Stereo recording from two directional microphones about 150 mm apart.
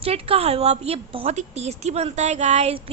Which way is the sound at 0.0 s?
40° right (ahead or behind).